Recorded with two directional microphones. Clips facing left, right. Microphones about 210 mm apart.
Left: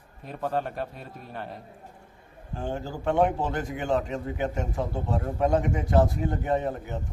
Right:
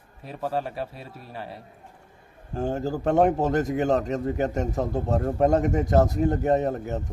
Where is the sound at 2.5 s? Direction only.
40° right (ahead or behind).